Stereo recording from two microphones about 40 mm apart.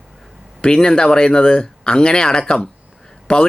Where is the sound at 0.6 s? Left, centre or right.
Left.